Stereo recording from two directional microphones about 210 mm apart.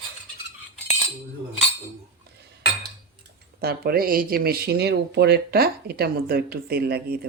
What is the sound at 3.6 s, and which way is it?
Speech, 50° right (ahead or behind).